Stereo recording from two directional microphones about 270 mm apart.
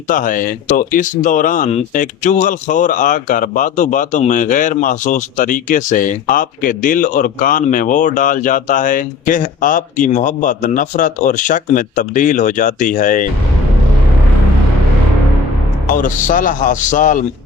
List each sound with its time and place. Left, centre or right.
0.1 s speech: left
15.9 s speech: left